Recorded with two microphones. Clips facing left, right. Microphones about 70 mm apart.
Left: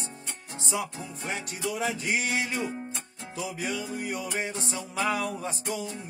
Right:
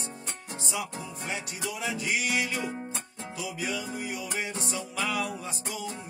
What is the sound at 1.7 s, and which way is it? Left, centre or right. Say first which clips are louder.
Music: left 2 dB; left.